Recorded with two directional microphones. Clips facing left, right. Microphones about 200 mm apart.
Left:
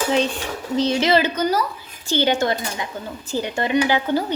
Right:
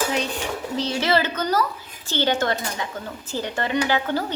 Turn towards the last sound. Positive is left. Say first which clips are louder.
# left 3 dB
turn(degrees=15)  # may be behind; listen again after turning